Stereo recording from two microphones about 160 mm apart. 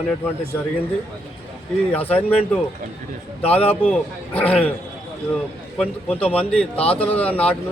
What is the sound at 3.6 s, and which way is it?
Speech, 35° left (ahead or behind).